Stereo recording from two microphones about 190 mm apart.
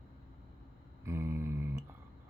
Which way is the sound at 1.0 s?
15° right (ahead or behind).